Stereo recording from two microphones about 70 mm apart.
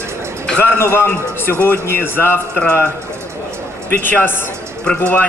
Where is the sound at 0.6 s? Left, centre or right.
Left.